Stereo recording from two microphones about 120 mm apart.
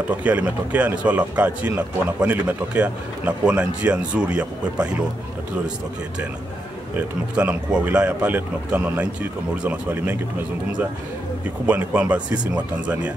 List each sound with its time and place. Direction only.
0.1 s speech: 10° right (ahead or behind)
7.0 s speech: 10° right (ahead or behind)
11.4 s speech: 15° right (ahead or behind)